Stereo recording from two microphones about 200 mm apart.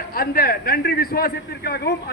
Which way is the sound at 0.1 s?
50° left (ahead or behind).